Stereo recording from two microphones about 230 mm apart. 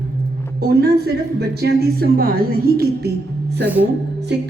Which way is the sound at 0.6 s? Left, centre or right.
Right.